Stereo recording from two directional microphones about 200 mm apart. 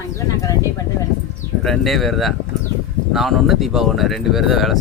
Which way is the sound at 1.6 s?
Centre (ahead or behind).